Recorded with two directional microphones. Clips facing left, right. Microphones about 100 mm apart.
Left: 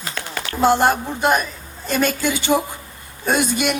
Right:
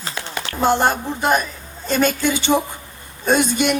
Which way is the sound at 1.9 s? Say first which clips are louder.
Right 2 dB; 25° right (ahead or behind).